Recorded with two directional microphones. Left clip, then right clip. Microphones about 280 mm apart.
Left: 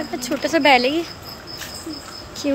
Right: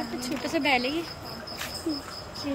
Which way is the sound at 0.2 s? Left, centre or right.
Centre.